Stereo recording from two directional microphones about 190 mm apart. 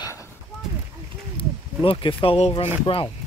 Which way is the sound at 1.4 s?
30° left (ahead or behind).